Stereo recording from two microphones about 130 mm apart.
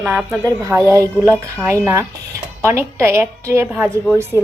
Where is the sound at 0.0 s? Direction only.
10° right (ahead or behind).